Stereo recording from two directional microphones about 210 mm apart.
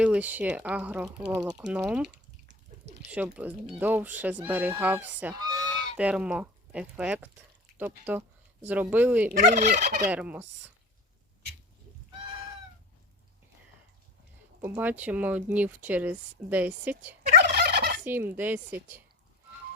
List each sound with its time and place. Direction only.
0.0 s speech: 5° right (ahead or behind)
3.1 s speech: 5° right (ahead or behind)
6.0 s speech: 5° right (ahead or behind)
9.4 s fowl: 35° right (ahead or behind)
10.1 s speech: 5° right (ahead or behind)
14.6 s speech: 10° right (ahead or behind)
17.3 s fowl: 50° right (ahead or behind)
18.0 s speech: 10° right (ahead or behind)